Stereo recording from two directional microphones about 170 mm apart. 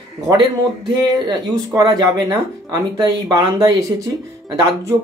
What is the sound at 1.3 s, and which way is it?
Speech, 25° right (ahead or behind).